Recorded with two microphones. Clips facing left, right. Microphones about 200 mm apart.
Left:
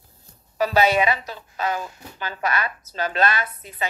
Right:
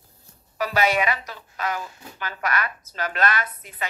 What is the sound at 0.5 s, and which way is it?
Speech, 25° left (ahead or behind).